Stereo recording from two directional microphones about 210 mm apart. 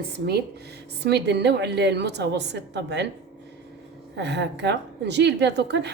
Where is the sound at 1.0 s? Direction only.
55° right (ahead or behind).